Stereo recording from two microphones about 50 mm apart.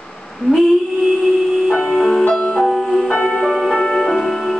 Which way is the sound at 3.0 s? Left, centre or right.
Centre.